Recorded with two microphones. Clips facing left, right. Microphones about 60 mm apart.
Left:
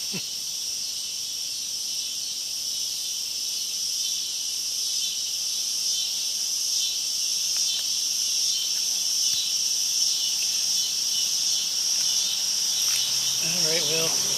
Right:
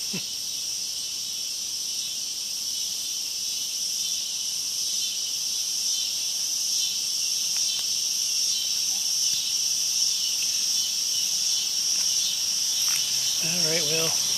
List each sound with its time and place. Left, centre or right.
13.7 s insect: centre